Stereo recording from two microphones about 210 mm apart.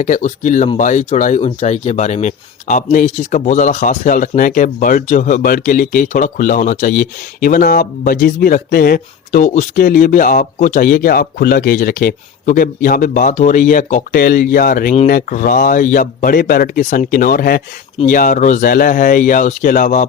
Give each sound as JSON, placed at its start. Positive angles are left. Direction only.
{"t": 0.0, "sound": "speech", "side_deg": 35}